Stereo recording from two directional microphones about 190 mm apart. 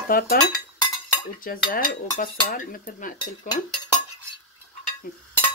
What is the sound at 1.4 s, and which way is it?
Speech, 50° left (ahead or behind).